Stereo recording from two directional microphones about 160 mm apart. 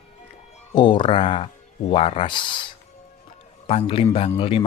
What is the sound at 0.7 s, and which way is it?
Speech, 30° left (ahead or behind).